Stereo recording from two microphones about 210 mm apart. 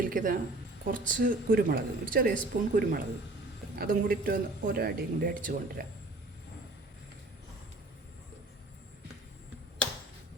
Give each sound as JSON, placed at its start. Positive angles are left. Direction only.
{"t": 0.1, "sound": "a man's voice", "side_deg": -40}